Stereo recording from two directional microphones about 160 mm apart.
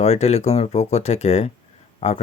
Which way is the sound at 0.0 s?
40° left (ahead or behind).